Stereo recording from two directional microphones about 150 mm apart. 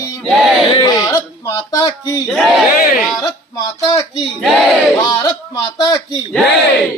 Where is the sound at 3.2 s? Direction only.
25° left (ahead or behind).